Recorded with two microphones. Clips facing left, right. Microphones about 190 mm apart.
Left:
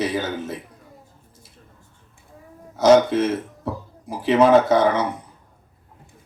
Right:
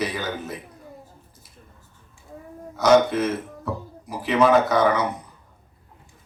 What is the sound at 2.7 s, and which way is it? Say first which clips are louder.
Speech: left 3 dB; 25° left (ahead or behind).